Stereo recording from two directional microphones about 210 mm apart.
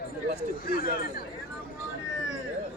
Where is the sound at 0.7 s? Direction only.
45° left (ahead or behind).